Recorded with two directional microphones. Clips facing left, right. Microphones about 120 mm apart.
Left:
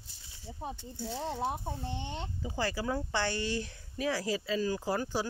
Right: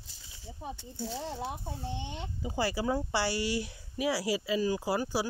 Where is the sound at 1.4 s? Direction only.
35° left (ahead or behind).